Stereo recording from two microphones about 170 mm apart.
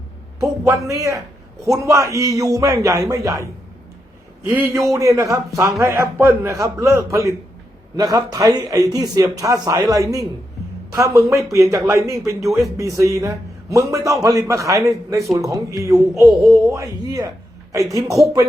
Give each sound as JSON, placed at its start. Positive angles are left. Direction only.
{"t": 0.3, "sound": "a man's voice", "side_deg": -20}